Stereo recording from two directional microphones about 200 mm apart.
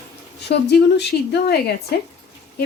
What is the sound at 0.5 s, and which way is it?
A woman's voice, 55° left (ahead or behind).